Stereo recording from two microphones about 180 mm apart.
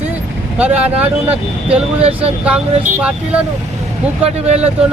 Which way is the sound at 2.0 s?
30° right (ahead or behind).